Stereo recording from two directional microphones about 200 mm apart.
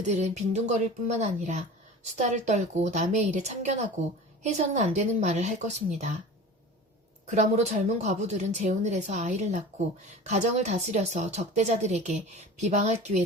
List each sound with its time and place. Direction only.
0.0 s a woman's voice: 35° right (ahead or behind)
7.3 s a woman's voice: 35° right (ahead or behind)